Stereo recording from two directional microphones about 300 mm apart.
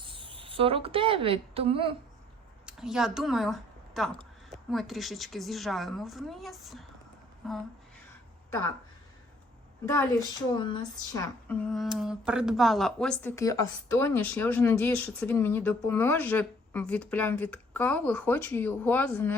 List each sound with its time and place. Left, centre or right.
0.0 s speech: centre
2.6 s a woman's voice: centre
9.8 s a woman's voice: centre